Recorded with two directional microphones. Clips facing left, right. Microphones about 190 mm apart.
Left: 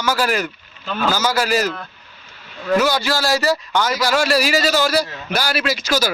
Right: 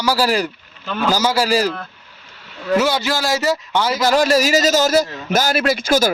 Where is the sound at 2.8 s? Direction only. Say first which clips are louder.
Even; 25° right (ahead or behind).